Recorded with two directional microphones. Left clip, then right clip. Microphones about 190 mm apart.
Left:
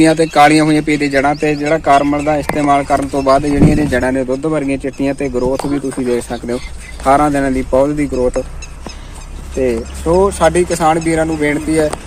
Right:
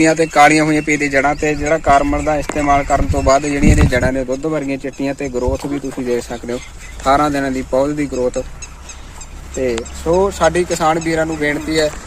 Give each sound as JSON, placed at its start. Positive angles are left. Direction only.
{"t": 0.0, "sound": "speech", "side_deg": -10}
{"t": 8.1, "sound": "speech", "side_deg": -5}
{"t": 9.6, "sound": "speech", "side_deg": -10}